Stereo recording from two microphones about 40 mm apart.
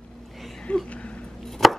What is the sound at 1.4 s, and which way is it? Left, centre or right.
Chopping, centre.